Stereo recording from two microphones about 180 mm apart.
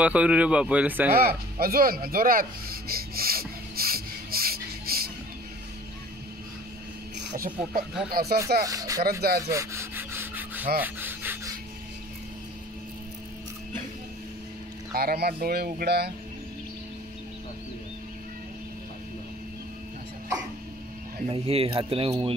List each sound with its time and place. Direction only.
0.0 s speech: 5° right (ahead or behind)
1.1 s a sound: 55° right (ahead or behind)
7.2 s snake: 70° right (ahead or behind)
8.1 s speech: 60° right (ahead or behind)
8.6 s speech: 20° right (ahead or behind)
9.5 s rub: 15° right (ahead or behind)
15.0 s speech: 60° right (ahead or behind)
21.3 s speech: 30° right (ahead or behind)